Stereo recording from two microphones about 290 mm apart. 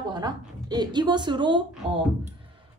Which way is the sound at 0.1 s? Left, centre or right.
Centre.